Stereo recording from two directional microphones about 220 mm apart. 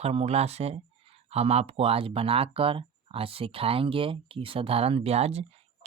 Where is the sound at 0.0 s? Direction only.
30° right (ahead or behind).